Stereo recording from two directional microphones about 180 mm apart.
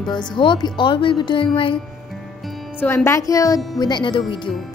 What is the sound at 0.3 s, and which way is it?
A woman's voice, 25° left (ahead or behind).